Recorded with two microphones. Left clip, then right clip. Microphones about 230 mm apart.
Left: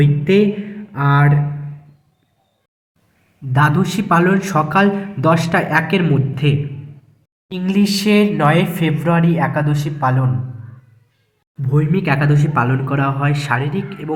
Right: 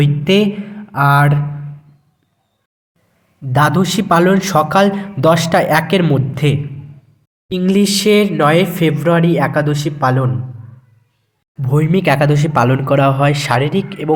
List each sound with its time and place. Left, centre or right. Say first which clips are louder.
0.0 s a man's voice: right 1 dB; right
3.5 s a man's voice: right 3 dB; right
11.6 s a man's voice: right 5 dB; right